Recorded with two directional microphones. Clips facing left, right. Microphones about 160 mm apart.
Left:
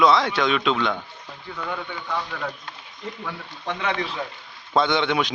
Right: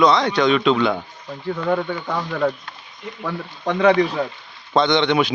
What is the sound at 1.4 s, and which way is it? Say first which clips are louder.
Speech: right 10 dB; 45° right (ahead or behind).